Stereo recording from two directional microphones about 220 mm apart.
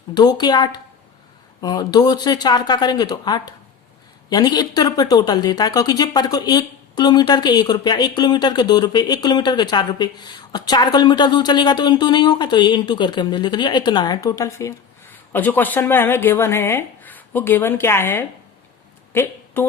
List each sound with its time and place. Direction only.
0.1 s speech: 20° left (ahead or behind)